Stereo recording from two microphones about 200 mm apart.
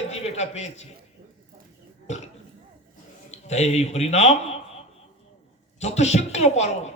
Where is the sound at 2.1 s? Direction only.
35° left (ahead or behind).